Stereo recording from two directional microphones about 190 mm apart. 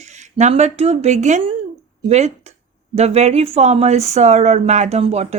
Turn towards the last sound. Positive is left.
turn(degrees=-35)  # may be behind; listen again after turning